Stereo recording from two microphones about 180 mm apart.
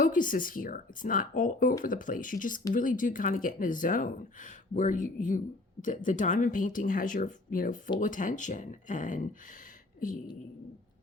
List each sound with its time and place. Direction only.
0.0 s speech: 45° left (ahead or behind)